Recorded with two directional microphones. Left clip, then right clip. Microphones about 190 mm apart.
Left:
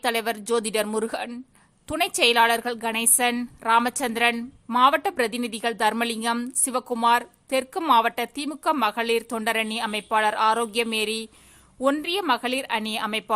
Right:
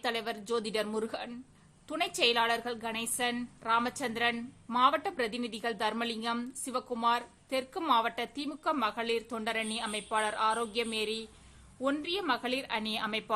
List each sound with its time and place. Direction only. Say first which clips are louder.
0.0 s a woman's voice: left 9 dB; 30° left (ahead or behind)